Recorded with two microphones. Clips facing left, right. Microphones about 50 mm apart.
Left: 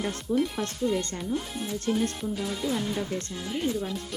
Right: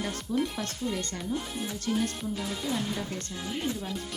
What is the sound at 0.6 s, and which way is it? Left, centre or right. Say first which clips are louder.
Speech: left 3 dB; left.